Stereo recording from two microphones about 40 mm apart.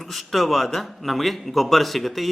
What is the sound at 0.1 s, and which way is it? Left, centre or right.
A man's voice, centre.